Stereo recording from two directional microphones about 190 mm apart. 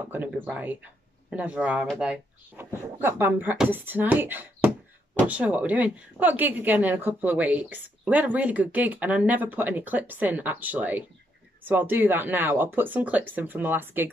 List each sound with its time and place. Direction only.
0.1 s a woman's voice: 10° right (ahead or behind)